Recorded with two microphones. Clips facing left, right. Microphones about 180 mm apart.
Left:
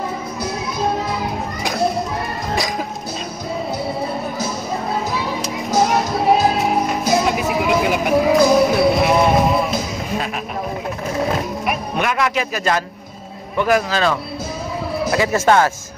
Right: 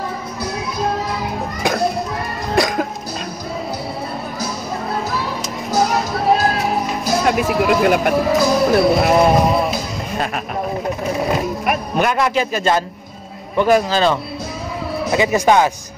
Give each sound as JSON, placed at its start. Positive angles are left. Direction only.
{"t": 5.1, "sound": "music", "side_deg": 0}
{"t": 11.1, "sound": "vehicle", "side_deg": 0}
{"t": 12.0, "sound": "a man's voice", "side_deg": -35}
{"t": 15.1, "sound": "speech", "side_deg": -15}